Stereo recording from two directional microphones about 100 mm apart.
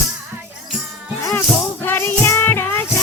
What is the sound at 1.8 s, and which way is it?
Music, 20° left (ahead or behind).